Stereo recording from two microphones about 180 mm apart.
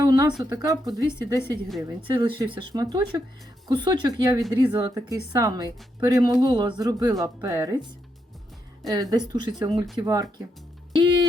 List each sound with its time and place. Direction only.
0.0 s a sound: 20° right (ahead or behind)
0.5 s speech: 20° right (ahead or behind)
8.9 s speech: 20° right (ahead or behind)
10.9 s music: 30° right (ahead or behind)